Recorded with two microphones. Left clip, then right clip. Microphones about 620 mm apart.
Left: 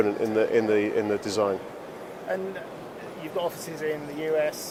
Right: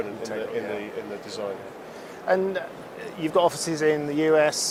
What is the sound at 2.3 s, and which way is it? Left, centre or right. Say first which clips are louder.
Speech: right 8 dB; right.